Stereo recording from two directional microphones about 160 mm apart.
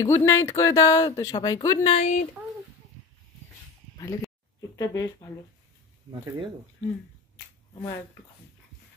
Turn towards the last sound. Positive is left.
turn(degrees=20)  # may be behind; listen again after turning